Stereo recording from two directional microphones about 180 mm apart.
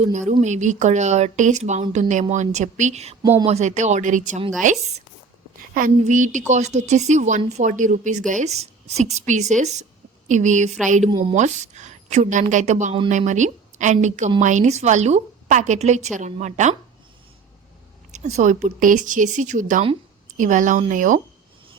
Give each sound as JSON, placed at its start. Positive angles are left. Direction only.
{"t": 0.1, "sound": "a woman's voice", "side_deg": -40}
{"t": 18.1, "sound": "speech", "side_deg": -40}